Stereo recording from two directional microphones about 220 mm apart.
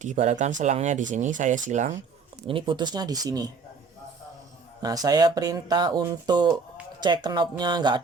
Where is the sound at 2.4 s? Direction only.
25° right (ahead or behind).